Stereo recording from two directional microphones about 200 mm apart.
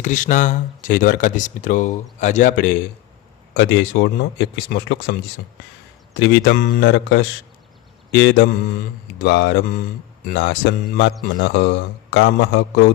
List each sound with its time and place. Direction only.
0.0 s speech: 40° left (ahead or behind)
3.5 s speech: 60° left (ahead or behind)
6.1 s speech: 60° left (ahead or behind)